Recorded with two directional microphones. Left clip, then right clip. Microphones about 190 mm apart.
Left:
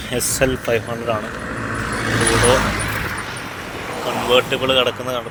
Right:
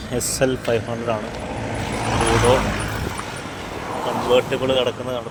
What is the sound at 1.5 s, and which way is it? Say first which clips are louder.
Vehicle: left 3 dB; 40° left (ahead or behind).